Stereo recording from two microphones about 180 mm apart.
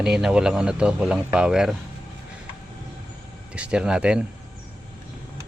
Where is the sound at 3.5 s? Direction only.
5° right (ahead or behind).